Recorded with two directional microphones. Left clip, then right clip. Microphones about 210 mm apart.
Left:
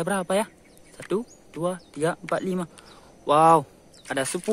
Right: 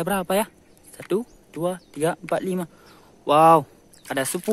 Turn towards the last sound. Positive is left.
turn(degrees=-10)  # may be behind; listen again after turning